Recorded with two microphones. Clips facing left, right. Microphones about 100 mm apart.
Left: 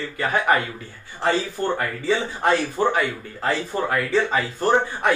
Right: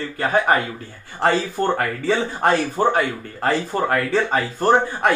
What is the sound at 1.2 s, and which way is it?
Speech, 60° right (ahead or behind).